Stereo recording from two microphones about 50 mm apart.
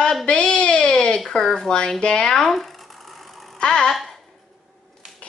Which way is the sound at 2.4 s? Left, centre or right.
Centre.